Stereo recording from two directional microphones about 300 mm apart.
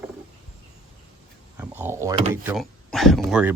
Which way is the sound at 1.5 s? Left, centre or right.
Centre.